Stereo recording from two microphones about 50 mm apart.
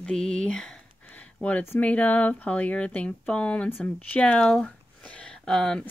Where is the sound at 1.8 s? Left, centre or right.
Left.